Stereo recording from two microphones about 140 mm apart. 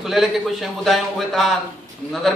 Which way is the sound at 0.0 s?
Centre (ahead or behind).